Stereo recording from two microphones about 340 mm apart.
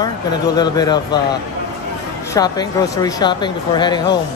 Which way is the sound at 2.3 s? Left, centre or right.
Centre.